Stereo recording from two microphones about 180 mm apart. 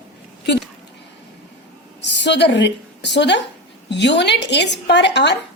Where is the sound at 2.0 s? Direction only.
75° left (ahead or behind).